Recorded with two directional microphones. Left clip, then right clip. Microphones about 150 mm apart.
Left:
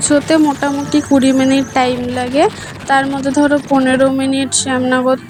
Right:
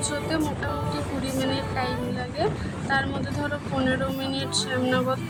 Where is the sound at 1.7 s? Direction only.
55° left (ahead or behind).